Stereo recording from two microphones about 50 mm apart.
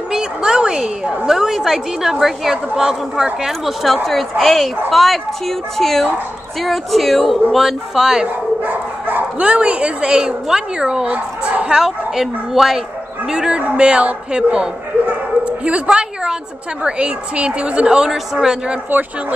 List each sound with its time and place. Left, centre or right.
0.1 s a woman's voice: centre
3.4 s a woman's voice: centre
8.6 s speech: right; by 11.1 s centre
11.1 s a sound: right
11.8 s speech: centre
13.3 s a woman's voice: centre
15.0 s bow-wow: right
16.8 s a woman's voice: right